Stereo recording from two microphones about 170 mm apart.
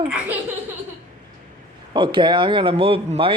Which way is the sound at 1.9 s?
30° right (ahead or behind).